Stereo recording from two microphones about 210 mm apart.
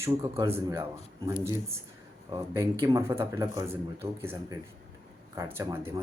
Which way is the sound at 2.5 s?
15° right (ahead or behind).